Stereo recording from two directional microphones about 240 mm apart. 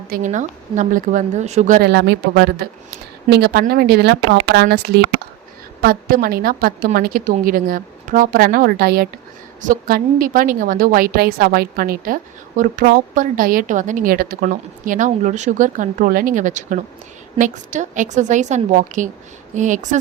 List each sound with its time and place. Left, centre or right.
0.1 s a woman's voice: right